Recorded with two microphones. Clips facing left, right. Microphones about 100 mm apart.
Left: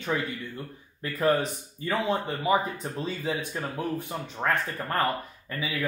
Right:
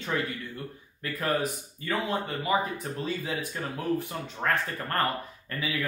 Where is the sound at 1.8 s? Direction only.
20° left (ahead or behind).